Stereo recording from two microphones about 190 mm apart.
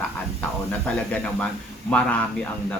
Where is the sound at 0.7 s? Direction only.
5° left (ahead or behind).